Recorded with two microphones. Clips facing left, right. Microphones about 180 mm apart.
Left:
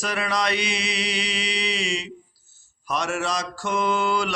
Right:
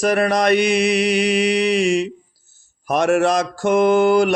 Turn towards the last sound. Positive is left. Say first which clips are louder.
# right 10 dB
turn(degrees=-50)  # may be behind; listen again after turning